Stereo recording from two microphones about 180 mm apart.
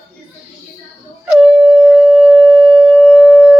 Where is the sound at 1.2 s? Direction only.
Centre (ahead or behind).